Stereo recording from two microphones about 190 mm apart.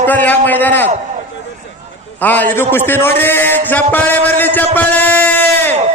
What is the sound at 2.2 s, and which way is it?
A man's voice, 10° left (ahead or behind).